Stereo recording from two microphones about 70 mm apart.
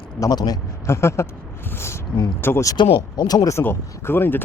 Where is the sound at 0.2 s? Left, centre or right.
Left.